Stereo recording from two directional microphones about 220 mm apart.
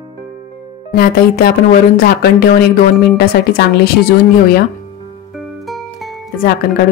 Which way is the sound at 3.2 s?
45° left (ahead or behind).